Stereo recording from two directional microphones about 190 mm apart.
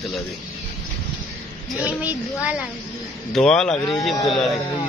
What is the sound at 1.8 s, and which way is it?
Speech, 5° right (ahead or behind).